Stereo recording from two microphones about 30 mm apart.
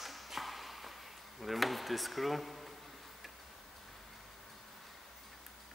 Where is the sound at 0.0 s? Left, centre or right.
Centre.